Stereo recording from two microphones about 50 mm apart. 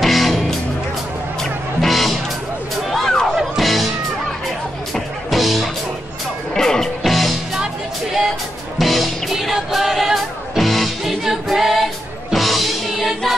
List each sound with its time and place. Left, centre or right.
0.0 s music: centre
1.8 s music: centre
2.9 s a sound: centre
3.3 s music: centre
4.9 s music: centre
6.5 s music: centre
8.7 s music: centre
11.2 s singing: centre
12.3 s music: centre